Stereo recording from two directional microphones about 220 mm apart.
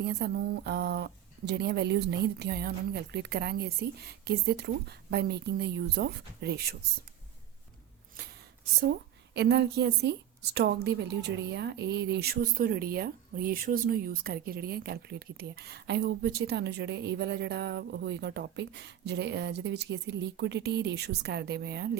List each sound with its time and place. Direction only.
0.0 s a woman's voice: 50° right (ahead or behind)
8.8 s a woman's voice: 50° right (ahead or behind)